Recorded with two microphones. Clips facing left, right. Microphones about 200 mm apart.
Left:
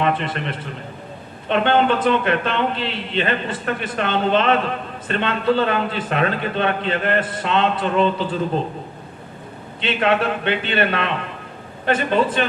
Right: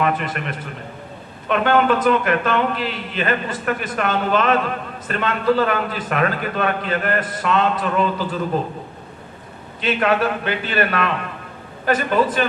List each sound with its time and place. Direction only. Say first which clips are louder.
0.0 s speech: even; 30° left (ahead or behind)
9.8 s speech: right 1 dB; 30° left (ahead or behind)